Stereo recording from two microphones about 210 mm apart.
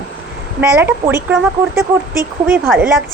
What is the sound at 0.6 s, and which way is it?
A woman's voice, 10° right (ahead or behind).